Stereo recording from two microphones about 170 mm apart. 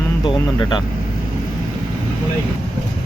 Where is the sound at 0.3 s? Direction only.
25° left (ahead or behind).